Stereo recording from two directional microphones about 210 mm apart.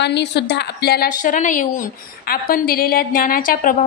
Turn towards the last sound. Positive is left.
turn(degrees=40)  # may be behind; listen again after turning